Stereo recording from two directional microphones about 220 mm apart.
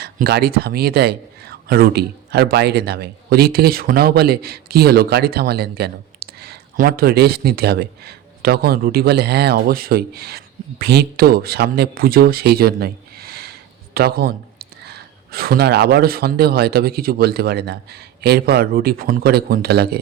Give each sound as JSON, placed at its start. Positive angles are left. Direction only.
{"t": 0.0, "sound": "a man's voice", "side_deg": -45}